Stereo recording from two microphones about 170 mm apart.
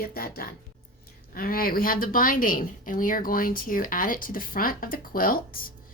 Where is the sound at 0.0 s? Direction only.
60° left (ahead or behind).